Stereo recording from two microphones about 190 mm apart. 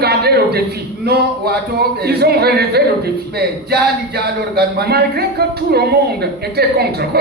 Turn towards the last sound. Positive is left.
turn(degrees=-55)  # may be behind; listen again after turning